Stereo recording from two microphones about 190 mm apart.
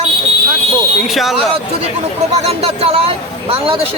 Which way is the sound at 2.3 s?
35° right (ahead or behind).